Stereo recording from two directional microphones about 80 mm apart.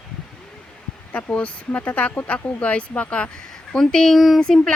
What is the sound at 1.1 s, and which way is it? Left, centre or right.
Speech, centre.